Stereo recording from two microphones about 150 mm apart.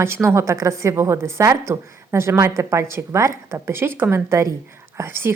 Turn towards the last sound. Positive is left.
turn(degrees=-15)  # may be behind; listen again after turning